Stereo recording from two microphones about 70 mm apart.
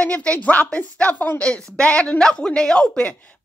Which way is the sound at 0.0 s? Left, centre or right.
Centre.